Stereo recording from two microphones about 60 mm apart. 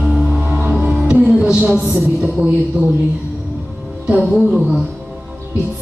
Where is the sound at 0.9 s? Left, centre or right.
Centre.